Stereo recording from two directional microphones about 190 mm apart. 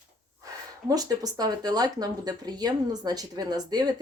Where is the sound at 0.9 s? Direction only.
20° right (ahead or behind).